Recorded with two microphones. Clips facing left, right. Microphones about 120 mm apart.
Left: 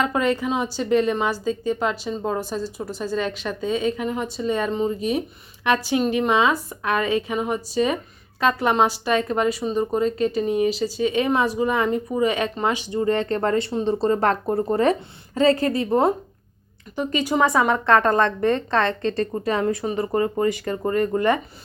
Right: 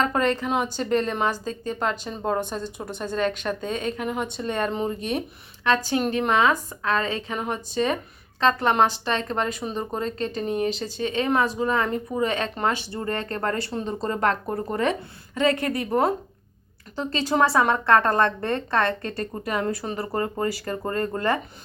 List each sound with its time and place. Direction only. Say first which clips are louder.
0.0 s speech: left 1 dB; 5° left (ahead or behind)
5.6 s speech: left 2 dB; 15° left (ahead or behind)
13.1 s speech: left 5 dB; 25° left (ahead or behind)
19.8 s speech: left 5 dB; 15° left (ahead or behind)